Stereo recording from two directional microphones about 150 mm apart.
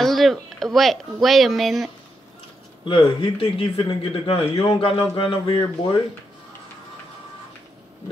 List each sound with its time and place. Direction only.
0.0 s speech: centre (ahead or behind)
2.9 s a man's voice: 35° left (ahead or behind)